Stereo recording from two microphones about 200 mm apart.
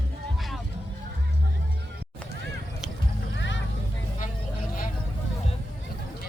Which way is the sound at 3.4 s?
65° left (ahead or behind).